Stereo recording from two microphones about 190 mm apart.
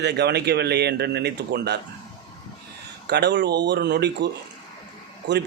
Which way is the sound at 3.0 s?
60° right (ahead or behind).